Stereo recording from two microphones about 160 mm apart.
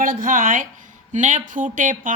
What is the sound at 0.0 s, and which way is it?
A woman's voice, 60° right (ahead or behind).